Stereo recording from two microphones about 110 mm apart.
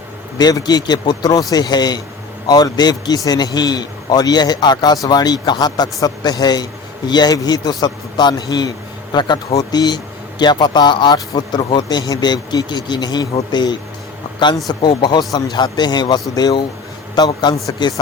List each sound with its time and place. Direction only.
0.3 s speech: 40° left (ahead or behind)